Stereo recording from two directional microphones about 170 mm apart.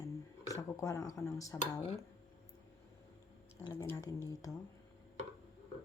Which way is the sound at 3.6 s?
15° left (ahead or behind).